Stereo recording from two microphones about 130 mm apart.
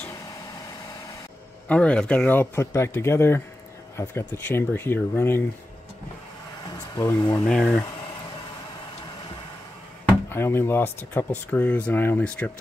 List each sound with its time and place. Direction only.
1.7 s speech: 10° left (ahead or behind)
7.2 s speech: 25° left (ahead or behind)
7.4 s speech: 5° left (ahead or behind)
10.3 s speech: 15° left (ahead or behind)